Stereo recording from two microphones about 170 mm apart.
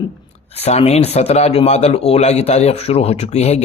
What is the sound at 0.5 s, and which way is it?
Speech, 40° left (ahead or behind).